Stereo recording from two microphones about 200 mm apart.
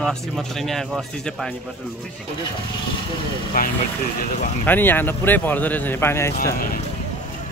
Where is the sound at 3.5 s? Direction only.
45° left (ahead or behind).